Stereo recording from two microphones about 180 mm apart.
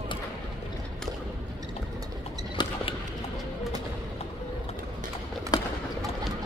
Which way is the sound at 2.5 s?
25° left (ahead or behind).